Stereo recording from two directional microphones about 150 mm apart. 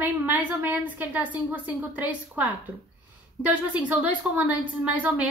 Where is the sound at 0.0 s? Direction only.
10° right (ahead or behind).